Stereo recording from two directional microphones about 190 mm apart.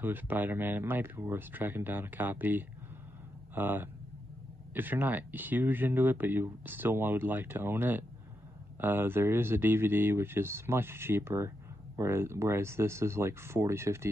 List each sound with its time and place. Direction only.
0.0 s speech: 10° right (ahead or behind)